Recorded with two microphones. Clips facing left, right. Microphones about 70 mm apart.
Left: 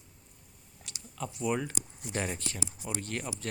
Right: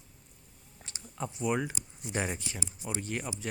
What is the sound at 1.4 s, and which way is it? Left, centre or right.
Speech, centre.